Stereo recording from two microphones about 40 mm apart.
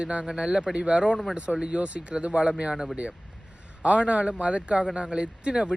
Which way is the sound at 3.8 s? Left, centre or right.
Right.